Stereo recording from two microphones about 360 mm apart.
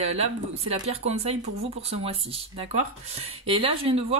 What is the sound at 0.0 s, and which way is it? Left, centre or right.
Speech, centre.